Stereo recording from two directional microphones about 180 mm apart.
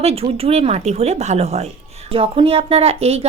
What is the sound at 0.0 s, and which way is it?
Speech, 35° right (ahead or behind).